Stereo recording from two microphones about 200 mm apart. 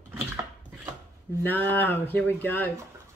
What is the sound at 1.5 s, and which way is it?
Speech, 10° left (ahead or behind).